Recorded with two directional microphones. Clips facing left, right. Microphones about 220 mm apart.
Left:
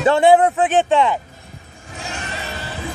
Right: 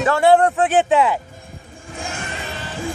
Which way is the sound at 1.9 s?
50° right (ahead or behind).